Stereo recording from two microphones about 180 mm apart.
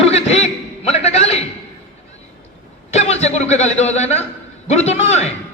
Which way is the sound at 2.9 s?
35° left (ahead or behind).